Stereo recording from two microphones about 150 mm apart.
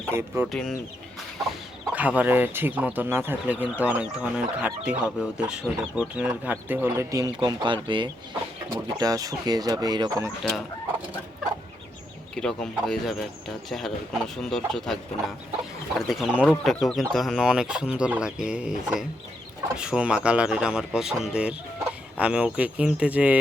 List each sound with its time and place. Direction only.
0.1 s speech: 15° right (ahead or behind)
0.5 s speech: centre (ahead or behind)
1.9 s speech: 10° right (ahead or behind)
7.3 s speech: 30° right (ahead or behind)
12.3 s speech: 5° left (ahead or behind)
16.0 s speech: 5° right (ahead or behind)